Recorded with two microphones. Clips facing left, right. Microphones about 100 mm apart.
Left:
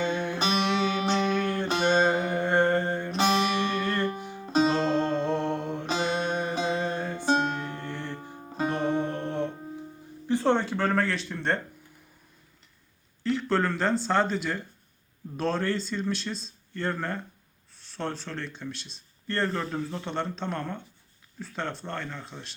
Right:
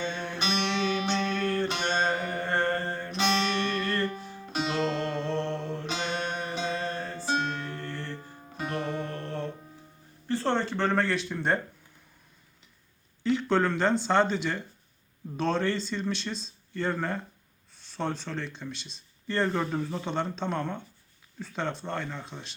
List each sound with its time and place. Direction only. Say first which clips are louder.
0.0 s music: left 5 dB; 15° left (ahead or behind)
4.5 s music: left 6 dB; 35° left (ahead or behind)
4.9 s music: left 4 dB; 20° left (ahead or behind)
5.8 s music: left 4 dB; 25° left (ahead or behind)
8.4 s music: left 7 dB; 40° left (ahead or behind)
8.6 s music: left 5 dB; 20° left (ahead or behind)
10.2 s speech: left 3 dB; 15° left (ahead or behind); by 11.6 s 5° right (ahead or behind)
13.2 s speech: right 1 dB; centre (ahead or behind)